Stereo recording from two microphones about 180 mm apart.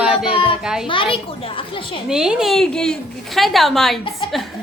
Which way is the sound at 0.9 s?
30° left (ahead or behind).